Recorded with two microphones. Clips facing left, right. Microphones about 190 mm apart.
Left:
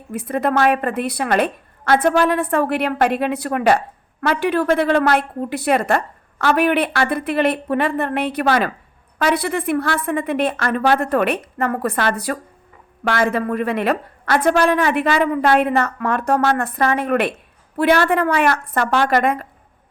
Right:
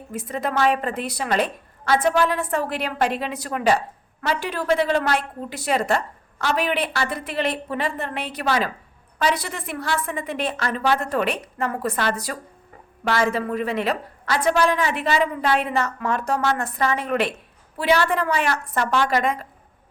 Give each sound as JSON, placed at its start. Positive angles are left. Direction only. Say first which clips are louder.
{"t": 0.1, "sound": "a woman's voice", "louder": "left 6 dB", "side_deg": 60}